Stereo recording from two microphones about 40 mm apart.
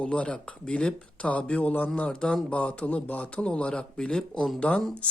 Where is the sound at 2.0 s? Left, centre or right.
Left.